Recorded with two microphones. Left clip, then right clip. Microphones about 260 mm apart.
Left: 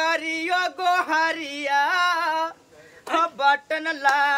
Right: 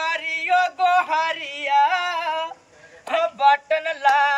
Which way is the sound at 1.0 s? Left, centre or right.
Left.